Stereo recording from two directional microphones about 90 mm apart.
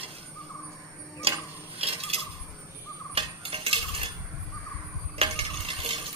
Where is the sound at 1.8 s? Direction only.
90° right.